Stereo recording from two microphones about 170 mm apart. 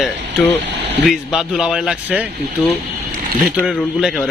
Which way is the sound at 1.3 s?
Centre (ahead or behind).